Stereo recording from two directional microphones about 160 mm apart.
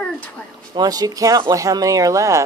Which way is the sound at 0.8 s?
25° right (ahead or behind).